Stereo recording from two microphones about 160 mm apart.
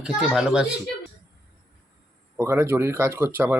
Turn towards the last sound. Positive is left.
turn(degrees=-15)  # may be behind; listen again after turning